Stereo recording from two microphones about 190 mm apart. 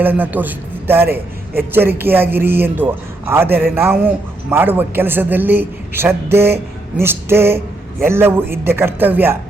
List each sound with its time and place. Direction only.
0.0 s a man's voice: 10° right (ahead or behind)